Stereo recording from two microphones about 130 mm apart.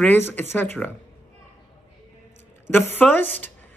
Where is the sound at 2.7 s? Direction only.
15° left (ahead or behind).